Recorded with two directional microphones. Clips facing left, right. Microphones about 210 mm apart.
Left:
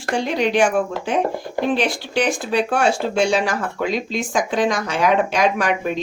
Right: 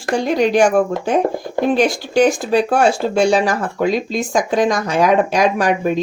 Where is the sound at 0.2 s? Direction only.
45° right (ahead or behind).